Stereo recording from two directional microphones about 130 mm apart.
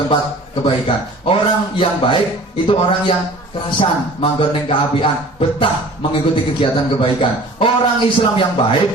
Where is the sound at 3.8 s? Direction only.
40° left (ahead or behind).